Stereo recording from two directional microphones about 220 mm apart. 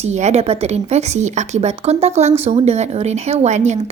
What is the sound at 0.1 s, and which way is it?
A woman's voice, 30° right (ahead or behind).